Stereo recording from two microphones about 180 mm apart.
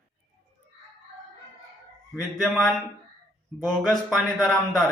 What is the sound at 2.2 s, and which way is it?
A man's voice, centre (ahead or behind).